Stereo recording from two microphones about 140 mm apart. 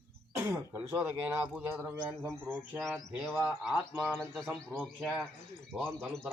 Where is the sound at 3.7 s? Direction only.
15° right (ahead or behind).